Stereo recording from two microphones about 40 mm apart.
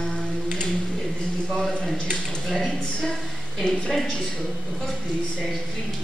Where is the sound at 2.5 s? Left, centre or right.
Centre.